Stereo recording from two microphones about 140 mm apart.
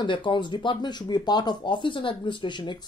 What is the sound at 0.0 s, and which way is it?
Speech, 35° left (ahead or behind).